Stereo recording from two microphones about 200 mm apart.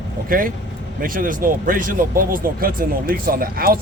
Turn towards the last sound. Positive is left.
turn(degrees=-45)  # may be behind; listen again after turning